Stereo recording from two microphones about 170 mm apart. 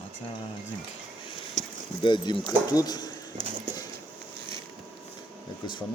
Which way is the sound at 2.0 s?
30° left (ahead or behind).